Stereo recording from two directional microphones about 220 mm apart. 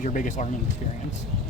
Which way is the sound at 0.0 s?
35° left (ahead or behind).